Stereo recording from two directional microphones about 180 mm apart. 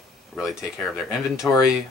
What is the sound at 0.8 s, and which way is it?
Speech, centre (ahead or behind).